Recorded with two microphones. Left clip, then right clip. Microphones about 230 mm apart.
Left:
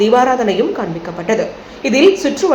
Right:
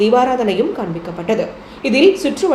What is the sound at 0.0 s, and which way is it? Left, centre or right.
Speech, centre.